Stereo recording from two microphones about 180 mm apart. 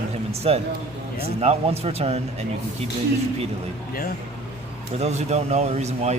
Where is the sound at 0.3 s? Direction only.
35° right (ahead or behind).